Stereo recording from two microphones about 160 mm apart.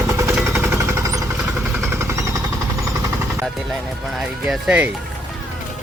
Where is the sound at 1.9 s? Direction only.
15° right (ahead or behind).